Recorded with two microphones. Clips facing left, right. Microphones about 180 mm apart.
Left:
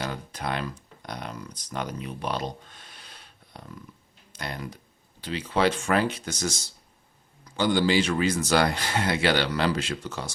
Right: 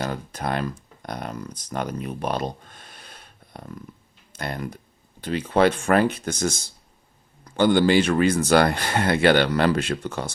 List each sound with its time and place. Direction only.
0.0 s speech: 45° right (ahead or behind)